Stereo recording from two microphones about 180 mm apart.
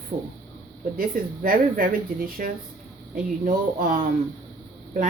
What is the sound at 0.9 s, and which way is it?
A woman's voice, 55° right (ahead or behind).